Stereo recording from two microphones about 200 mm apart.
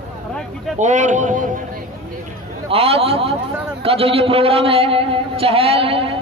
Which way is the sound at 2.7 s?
30° right (ahead or behind).